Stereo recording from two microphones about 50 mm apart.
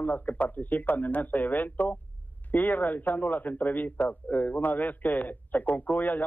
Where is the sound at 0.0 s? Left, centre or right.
Left.